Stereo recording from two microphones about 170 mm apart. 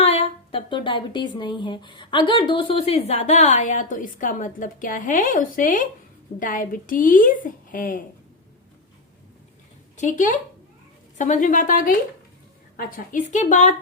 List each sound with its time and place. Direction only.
0.0 s a woman's voice: 35° left (ahead or behind); by 8.0 s 50° left (ahead or behind)
10.0 s a woman's voice: 50° left (ahead or behind)